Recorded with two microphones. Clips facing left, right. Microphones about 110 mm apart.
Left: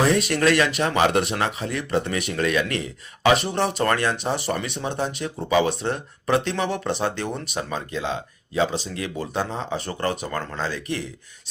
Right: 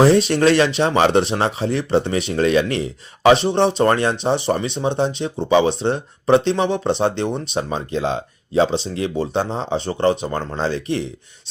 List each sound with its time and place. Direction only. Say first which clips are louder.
0.0 s speech: right 6 dB; 30° right (ahead or behind)